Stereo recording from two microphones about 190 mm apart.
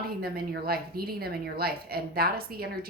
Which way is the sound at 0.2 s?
55° right (ahead or behind).